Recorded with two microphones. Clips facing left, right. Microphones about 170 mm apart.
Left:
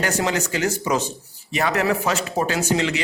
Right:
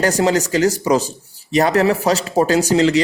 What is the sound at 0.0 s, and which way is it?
Speech, 40° right (ahead or behind).